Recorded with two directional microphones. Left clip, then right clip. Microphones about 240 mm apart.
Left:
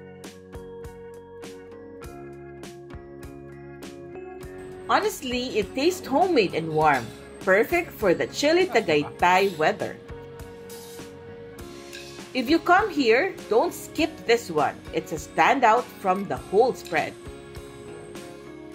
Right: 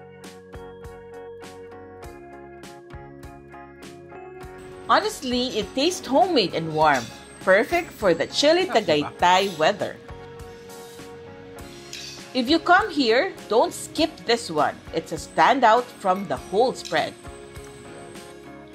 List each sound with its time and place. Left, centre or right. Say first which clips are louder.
4.8 s a woman's voice: right 3 dB; centre
12.4 s a woman's voice: right 2 dB; centre